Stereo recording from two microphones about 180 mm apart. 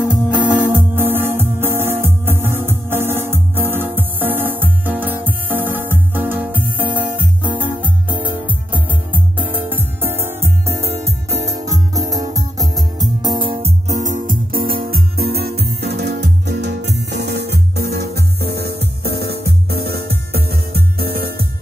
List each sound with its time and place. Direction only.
0.0 s music: 5° right (ahead or behind); by 13.7 s 30° right (ahead or behind)
13.8 s music: 45° right (ahead or behind)